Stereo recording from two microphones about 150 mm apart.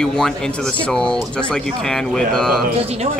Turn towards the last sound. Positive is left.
turn(degrees=-45)  # may be behind; listen again after turning